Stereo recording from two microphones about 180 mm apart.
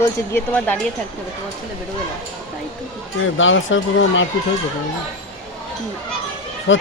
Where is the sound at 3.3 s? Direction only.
90° left.